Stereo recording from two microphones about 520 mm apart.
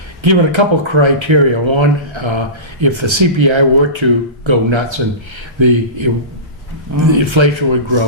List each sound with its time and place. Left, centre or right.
0.2 s speech: right
7.1 s speech: right